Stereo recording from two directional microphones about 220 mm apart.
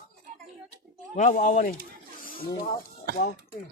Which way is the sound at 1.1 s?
35° left (ahead or behind).